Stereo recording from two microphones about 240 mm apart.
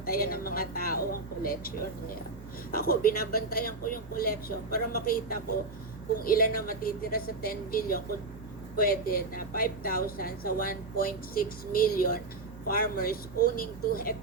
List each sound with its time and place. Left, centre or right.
0.0 s a woman's voice: left
2.7 s a woman's voice: left